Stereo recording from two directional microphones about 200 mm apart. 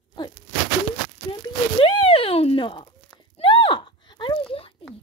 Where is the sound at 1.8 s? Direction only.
30° left (ahead or behind).